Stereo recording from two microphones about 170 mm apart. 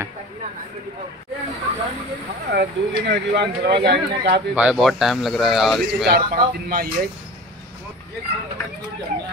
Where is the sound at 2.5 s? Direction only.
80° right.